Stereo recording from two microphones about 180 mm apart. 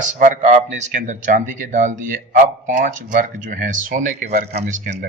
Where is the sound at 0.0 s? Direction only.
45° right (ahead or behind).